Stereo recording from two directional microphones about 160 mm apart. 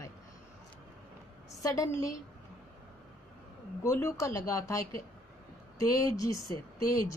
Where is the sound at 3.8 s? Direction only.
20° left (ahead or behind).